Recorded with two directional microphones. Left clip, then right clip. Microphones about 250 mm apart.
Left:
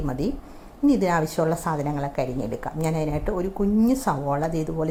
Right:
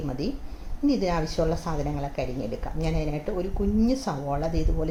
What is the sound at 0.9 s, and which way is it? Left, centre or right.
Speech, centre.